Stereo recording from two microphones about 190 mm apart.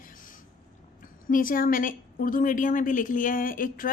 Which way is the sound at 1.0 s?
45° left (ahead or behind).